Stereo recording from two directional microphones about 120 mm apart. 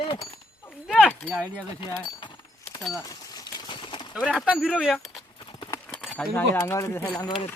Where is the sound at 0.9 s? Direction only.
10° left (ahead or behind).